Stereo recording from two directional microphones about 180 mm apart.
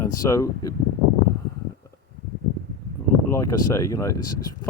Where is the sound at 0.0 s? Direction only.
15° left (ahead or behind).